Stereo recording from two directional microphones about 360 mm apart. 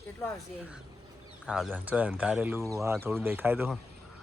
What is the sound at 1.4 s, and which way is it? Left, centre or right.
Speech, centre.